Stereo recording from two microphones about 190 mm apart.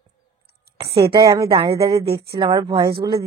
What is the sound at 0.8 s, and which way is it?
Speech, 55° right (ahead or behind).